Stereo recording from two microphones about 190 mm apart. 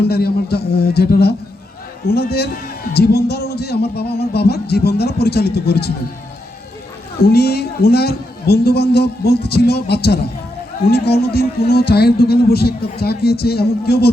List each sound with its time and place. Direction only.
0.0 s a man's voice: 55° left (ahead or behind)
7.2 s a man's voice: 55° left (ahead or behind)